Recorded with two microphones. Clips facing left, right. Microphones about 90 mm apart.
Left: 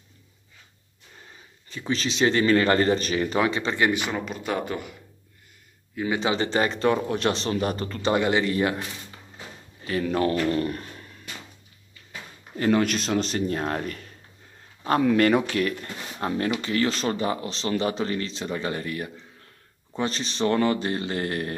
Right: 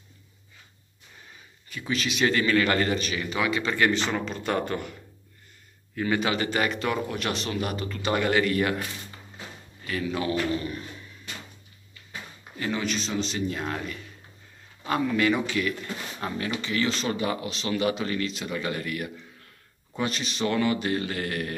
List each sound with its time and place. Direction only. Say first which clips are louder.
1.7 s a man's voice: left 2 dB; 30° left (ahead or behind); by 4.9 s 5° left (ahead or behind)
6.1 s a man's voice: left 2 dB; 25° left (ahead or behind)
8.1 s a man's voice: left 1 dB; 20° left (ahead or behind)
10.0 s a man's voice: left 5 dB; 50° left (ahead or behind)
10.5 s a sound: left 4 dB; 55° left (ahead or behind)
12.5 s a man's voice: left 7 dB; 45° left (ahead or behind)
15.0 s speech: left 5 dB; 65° left (ahead or behind)
15.2 s a man's voice: left 3 dB; 50° left (ahead or behind); by 21.5 s 30° left (ahead or behind)